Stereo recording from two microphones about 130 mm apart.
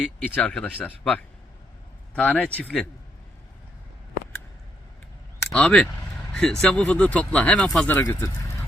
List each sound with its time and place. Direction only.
0.3 s speech: 5° left (ahead or behind)
5.5 s speech: 5° left (ahead or behind)
8.0 s speech: 25° left (ahead or behind)